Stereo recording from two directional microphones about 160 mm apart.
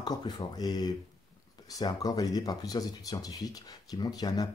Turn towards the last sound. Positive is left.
turn(degrees=25)  # may be behind; listen again after turning